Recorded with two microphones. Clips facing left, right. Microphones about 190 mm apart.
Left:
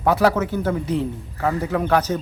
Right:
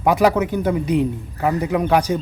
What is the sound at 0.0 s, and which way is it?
A man's voice, 15° right (ahead or behind).